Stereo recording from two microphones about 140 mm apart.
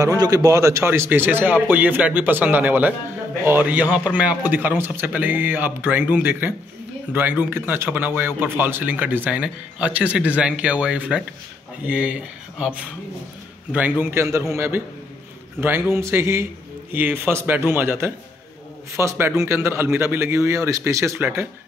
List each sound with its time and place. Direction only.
0.0 s a man's voice: 25° right (ahead or behind)